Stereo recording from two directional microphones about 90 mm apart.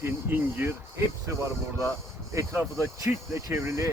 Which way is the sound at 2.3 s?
35° right (ahead or behind).